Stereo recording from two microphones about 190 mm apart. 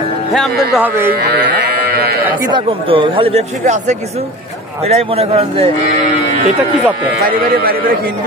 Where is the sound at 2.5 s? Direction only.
25° right (ahead or behind).